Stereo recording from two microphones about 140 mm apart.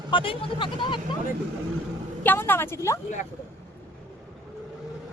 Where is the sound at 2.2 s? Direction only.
15° left (ahead or behind).